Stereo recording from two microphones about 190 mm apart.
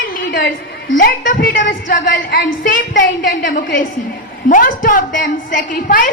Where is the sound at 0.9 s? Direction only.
45° left (ahead or behind).